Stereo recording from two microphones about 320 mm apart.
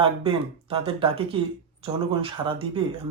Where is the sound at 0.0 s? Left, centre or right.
Centre.